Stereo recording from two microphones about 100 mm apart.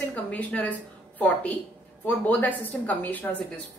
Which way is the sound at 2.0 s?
15° left (ahead or behind).